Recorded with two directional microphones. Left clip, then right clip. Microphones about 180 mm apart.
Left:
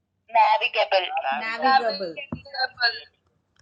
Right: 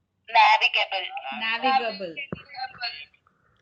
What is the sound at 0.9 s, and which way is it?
Speech, 45° left (ahead or behind).